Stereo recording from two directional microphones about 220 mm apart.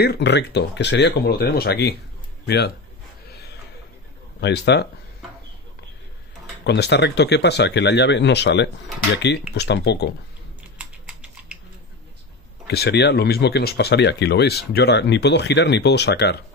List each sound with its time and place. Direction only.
0.0 s speech: 50° left (ahead or behind)
4.4 s speech: 50° left (ahead or behind)
6.6 s speech: 50° left (ahead or behind)
12.6 s speech: 50° left (ahead or behind)